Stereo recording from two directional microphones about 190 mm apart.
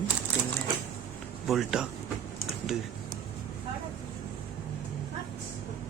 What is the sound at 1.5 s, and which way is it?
Speech, centre (ahead or behind).